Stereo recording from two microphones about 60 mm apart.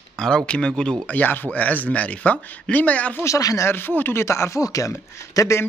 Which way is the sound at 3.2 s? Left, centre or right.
Left.